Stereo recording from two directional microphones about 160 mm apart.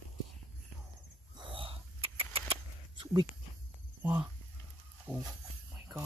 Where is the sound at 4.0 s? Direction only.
10° right (ahead or behind).